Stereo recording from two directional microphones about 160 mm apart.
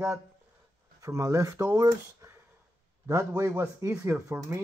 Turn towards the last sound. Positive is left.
turn(degrees=-15)  # may be behind; listen again after turning